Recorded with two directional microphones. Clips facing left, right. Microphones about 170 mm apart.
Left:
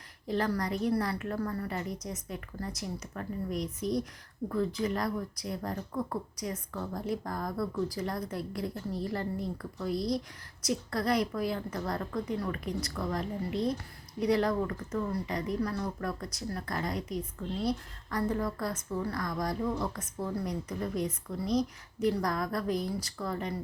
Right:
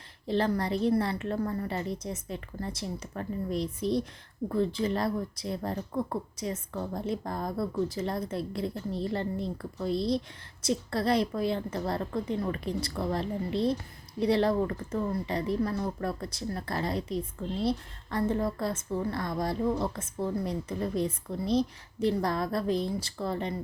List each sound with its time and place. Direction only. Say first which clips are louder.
0.3 s speech: right 3 dB; 25° right (ahead or behind)